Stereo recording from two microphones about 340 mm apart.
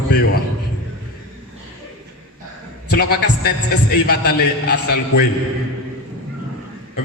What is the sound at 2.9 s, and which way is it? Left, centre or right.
A man's voice, left.